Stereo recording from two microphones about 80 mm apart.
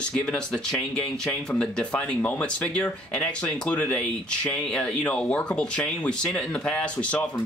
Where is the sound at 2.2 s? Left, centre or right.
Left.